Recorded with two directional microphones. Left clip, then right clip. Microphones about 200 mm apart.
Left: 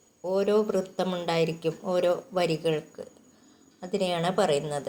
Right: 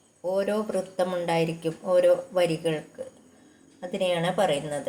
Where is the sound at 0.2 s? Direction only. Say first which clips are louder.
Left 2 dB; 25° left (ahead or behind).